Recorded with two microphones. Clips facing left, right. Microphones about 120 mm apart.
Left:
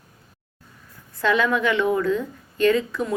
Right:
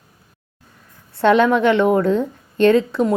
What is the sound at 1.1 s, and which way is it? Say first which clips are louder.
A woman's voice: right 7 dB; 25° right (ahead or behind).